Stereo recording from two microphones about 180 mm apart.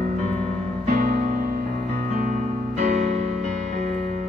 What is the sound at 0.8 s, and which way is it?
Music, 45° right (ahead or behind).